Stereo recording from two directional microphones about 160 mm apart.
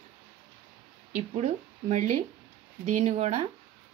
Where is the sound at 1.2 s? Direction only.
45° right (ahead or behind).